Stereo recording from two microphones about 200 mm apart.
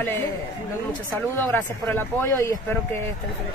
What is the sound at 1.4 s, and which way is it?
A woman's voice, 10° left (ahead or behind).